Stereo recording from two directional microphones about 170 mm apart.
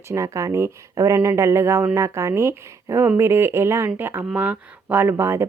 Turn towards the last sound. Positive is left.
turn(degrees=-15)  # may be behind; listen again after turning